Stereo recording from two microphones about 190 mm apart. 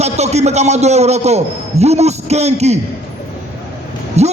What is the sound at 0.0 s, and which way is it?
A man's voice, 35° right (ahead or behind).